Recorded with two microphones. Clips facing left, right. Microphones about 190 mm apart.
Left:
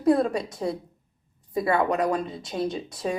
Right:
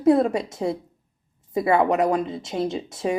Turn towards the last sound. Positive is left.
turn(degrees=-25)  # may be behind; listen again after turning